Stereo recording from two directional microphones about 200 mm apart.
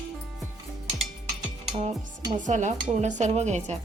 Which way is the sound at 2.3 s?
40° right (ahead or behind).